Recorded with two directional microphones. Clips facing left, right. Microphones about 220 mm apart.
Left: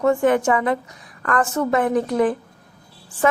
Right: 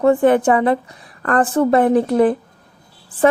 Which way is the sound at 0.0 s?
35° right (ahead or behind).